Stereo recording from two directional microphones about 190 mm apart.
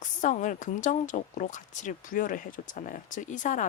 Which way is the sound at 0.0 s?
40° left (ahead or behind).